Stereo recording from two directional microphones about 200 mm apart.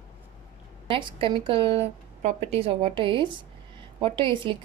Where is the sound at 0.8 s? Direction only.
25° right (ahead or behind).